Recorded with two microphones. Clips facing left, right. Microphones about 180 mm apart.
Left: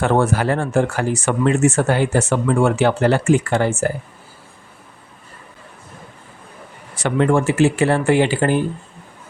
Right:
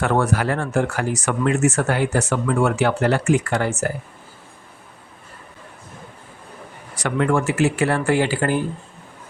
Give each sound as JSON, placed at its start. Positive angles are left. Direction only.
{"t": 0.0, "sound": "speech", "side_deg": 25}
{"t": 6.9, "sound": "speech", "side_deg": 25}